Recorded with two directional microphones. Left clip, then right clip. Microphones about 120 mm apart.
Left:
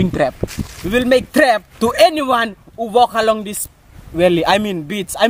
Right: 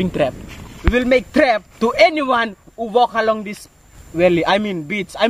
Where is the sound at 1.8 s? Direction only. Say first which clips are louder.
Left 1 dB; 40° left (ahead or behind).